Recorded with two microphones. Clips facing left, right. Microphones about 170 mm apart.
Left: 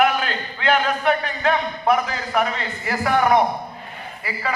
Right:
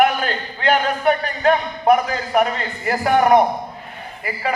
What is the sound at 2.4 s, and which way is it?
A man's voice, 40° right (ahead or behind).